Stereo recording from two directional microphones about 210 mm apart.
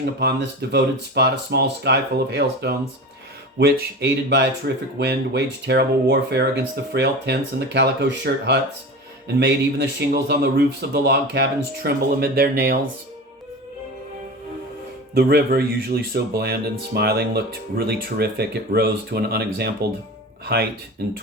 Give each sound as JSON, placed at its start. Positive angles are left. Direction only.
{"t": 0.0, "sound": "speech", "side_deg": -50}
{"t": 15.1, "sound": "speech", "side_deg": -50}